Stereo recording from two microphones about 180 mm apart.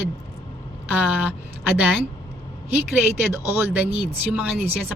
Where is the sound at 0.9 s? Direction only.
5° right (ahead or behind).